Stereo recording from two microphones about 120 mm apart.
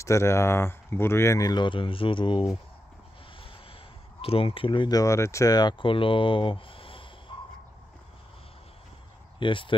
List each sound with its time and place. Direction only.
0.0 s speech: 25° left (ahead or behind); by 2.4 s 45° left (ahead or behind)
4.2 s speech: 50° left (ahead or behind)
4.9 s speech: 25° left (ahead or behind); by 7.1 s 50° left (ahead or behind)
9.4 s speech: 45° left (ahead or behind)